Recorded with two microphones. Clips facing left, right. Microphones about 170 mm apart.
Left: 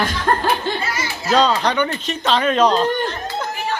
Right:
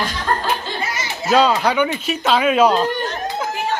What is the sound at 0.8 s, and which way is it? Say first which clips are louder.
Speech: even; 20° right (ahead or behind).